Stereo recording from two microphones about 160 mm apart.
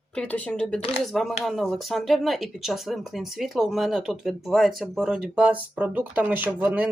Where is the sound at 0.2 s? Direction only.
10° left (ahead or behind).